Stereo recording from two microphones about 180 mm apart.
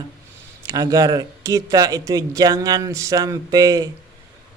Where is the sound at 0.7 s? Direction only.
20° right (ahead or behind).